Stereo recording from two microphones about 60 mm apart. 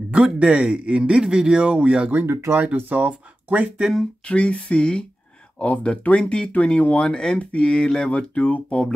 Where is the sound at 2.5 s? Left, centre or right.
Right.